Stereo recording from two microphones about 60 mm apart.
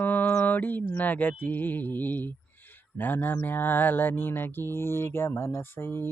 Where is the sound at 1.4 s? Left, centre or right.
Left.